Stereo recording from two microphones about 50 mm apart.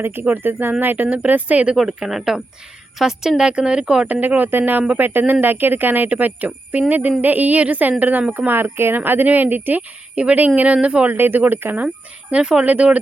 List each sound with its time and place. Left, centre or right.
0.0 s speech: right
1.7 s speech: centre
4.0 s speech: right
10.2 s speech: right
11.1 s speech: right
12.3 s speech: centre
12.6 s speech: right